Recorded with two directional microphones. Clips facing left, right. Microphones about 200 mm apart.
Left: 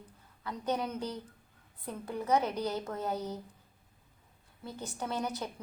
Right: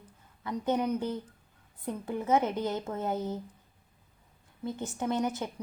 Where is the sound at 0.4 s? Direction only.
15° right (ahead or behind).